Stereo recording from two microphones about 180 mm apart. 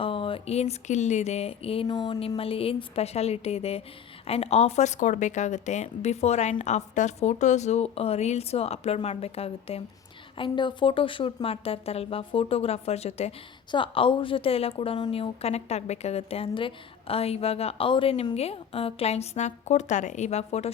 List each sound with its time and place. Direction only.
0.0 s a woman's voice: 30° left (ahead or behind)